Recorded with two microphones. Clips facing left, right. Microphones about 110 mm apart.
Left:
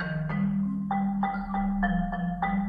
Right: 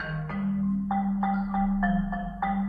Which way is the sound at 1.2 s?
Centre (ahead or behind).